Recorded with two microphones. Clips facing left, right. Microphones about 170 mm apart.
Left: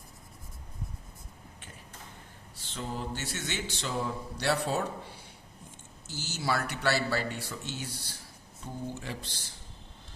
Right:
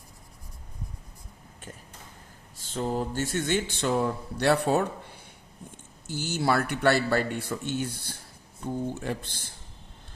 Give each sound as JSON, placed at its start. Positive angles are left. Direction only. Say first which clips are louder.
{"t": 2.6, "sound": "speech", "louder": "right 8 dB", "side_deg": -45}